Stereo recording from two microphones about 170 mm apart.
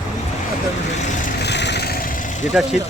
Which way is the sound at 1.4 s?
90° left.